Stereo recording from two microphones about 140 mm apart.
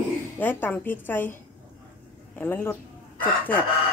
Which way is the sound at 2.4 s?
15° left (ahead or behind).